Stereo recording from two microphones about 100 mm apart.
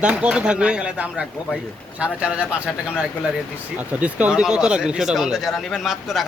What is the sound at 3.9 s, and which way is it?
Speech, 15° right (ahead or behind).